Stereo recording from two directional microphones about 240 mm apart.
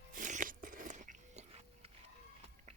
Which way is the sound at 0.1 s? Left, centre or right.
Right.